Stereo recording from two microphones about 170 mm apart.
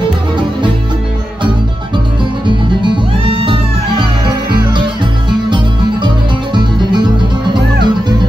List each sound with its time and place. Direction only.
2.4 s music: 30° right (ahead or behind)
6.0 s music: 25° right (ahead or behind)